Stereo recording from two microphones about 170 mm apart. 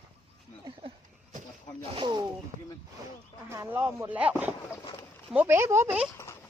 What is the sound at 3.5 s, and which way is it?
Speech, 15° right (ahead or behind).